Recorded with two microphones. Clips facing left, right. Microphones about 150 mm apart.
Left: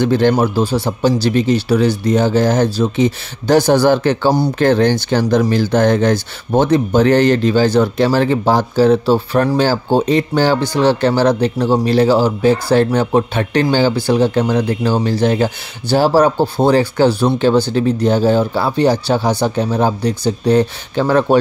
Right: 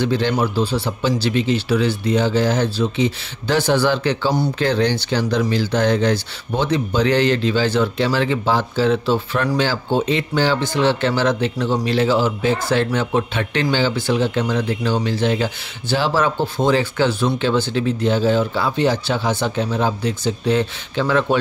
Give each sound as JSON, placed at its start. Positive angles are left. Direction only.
{"t": 0.0, "sound": "speech", "side_deg": 50}